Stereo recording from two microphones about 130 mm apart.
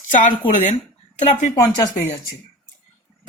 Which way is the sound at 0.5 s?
65° left (ahead or behind).